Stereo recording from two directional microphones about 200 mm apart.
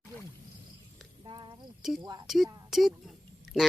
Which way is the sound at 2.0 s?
20° right (ahead or behind).